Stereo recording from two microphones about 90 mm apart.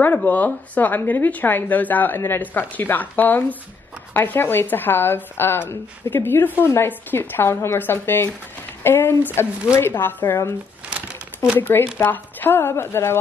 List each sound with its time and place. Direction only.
0.0 s speech: 20° left (ahead or behind)
10.9 s crumpling: 15° right (ahead or behind)
12.0 s speech: 20° left (ahead or behind)